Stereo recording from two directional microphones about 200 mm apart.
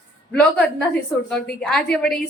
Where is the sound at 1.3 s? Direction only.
5° left (ahead or behind).